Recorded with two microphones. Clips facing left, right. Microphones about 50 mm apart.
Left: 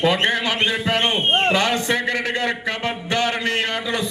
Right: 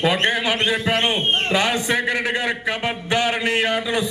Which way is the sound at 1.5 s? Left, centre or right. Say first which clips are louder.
Even; centre.